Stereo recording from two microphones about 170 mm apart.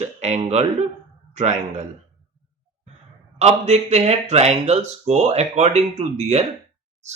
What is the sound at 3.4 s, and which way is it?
Speech, 40° right (ahead or behind).